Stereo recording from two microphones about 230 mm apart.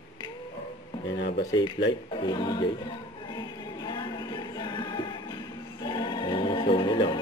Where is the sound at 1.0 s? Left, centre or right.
Left.